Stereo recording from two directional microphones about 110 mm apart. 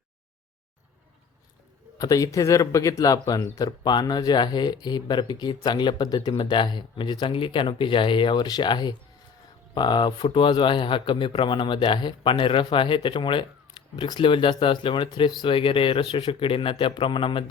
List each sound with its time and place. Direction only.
2.0 s speech: 35° left (ahead or behind); by 17.4 s 50° left (ahead or behind)